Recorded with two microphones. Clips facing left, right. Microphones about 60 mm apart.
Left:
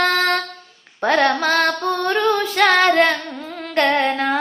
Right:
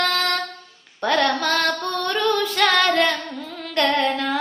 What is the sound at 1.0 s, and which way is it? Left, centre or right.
Female singing, left.